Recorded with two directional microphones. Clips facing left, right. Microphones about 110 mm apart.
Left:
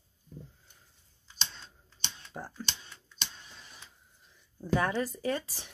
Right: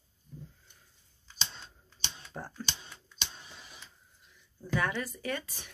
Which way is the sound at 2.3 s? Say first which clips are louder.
Left 1 dB; 10° left (ahead or behind).